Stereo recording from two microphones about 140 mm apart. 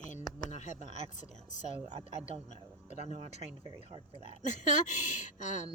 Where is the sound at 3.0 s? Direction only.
50° right (ahead or behind).